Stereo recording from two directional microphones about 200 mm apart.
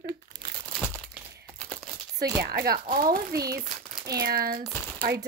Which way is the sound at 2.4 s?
50° right (ahead or behind).